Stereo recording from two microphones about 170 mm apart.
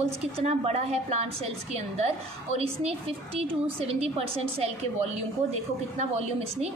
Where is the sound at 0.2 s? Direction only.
40° right (ahead or behind).